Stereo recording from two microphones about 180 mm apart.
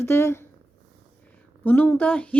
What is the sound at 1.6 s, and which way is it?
Speech, 10° left (ahead or behind).